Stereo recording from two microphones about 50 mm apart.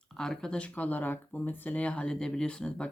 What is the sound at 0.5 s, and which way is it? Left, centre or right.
Speech, left.